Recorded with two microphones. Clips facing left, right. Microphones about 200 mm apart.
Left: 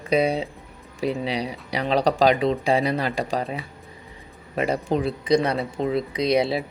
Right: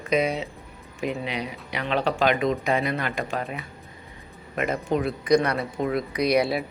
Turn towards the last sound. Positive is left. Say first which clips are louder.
# left 1 dB
turn(degrees=25)  # may be behind; listen again after turning